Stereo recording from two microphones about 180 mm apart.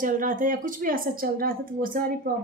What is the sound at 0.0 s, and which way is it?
Speech, 50° right (ahead or behind).